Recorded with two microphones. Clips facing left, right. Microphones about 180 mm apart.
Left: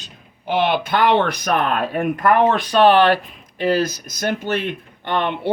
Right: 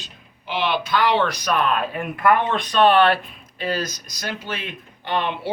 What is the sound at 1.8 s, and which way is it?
Speech, 40° left (ahead or behind).